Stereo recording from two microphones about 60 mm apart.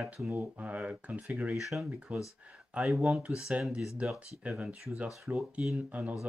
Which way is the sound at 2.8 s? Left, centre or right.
Centre.